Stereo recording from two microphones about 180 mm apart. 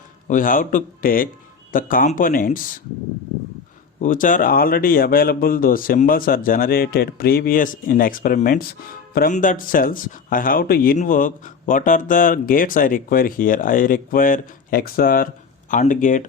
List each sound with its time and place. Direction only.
0.3 s speech: 50° left (ahead or behind)
4.0 s speech: 45° left (ahead or behind)